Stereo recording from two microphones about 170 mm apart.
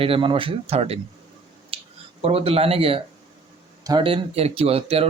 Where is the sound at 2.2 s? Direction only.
35° right (ahead or behind).